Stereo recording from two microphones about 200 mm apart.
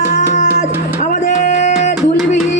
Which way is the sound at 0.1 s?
35° left (ahead or behind).